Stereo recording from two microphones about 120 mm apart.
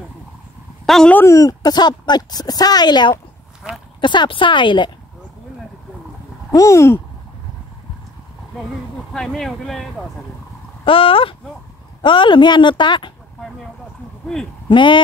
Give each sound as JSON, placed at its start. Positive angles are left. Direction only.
{"t": 0.8, "sound": "speech", "side_deg": 5}
{"t": 1.1, "sound": "speech", "side_deg": 25}
{"t": 3.6, "sound": "a sound", "side_deg": -5}
{"t": 4.0, "sound": "speech", "side_deg": 40}
{"t": 6.5, "sound": "speech", "side_deg": 25}
{"t": 9.1, "sound": "speech", "side_deg": 5}
{"t": 10.9, "sound": "speech", "side_deg": 50}
{"t": 14.7, "sound": "speech", "side_deg": 40}